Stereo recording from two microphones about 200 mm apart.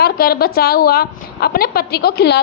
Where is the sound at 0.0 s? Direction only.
50° left (ahead or behind).